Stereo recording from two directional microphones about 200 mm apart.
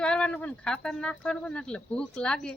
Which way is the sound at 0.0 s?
5° left (ahead or behind).